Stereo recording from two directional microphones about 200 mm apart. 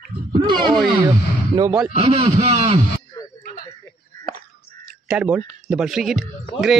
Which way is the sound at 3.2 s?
15° left (ahead or behind).